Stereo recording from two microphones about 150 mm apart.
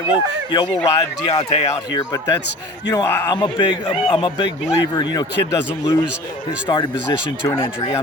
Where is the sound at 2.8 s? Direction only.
25° left (ahead or behind).